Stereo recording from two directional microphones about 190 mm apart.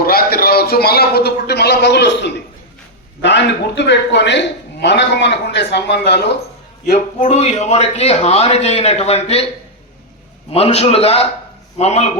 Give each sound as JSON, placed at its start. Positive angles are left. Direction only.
{"t": 0.0, "sound": "a man's voice", "side_deg": 50}
{"t": 7.2, "sound": "a man's voice", "side_deg": 35}
{"t": 10.5, "sound": "a man's voice", "side_deg": 30}